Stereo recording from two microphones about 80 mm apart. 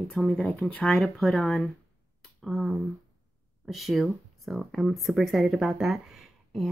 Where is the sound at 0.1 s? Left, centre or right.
Centre.